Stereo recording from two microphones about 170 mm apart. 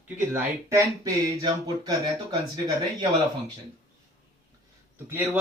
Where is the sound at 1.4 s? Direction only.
25° right (ahead or behind).